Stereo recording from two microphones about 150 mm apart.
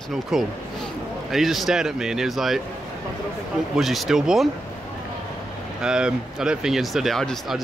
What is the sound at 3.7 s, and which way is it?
Speech, centre (ahead or behind).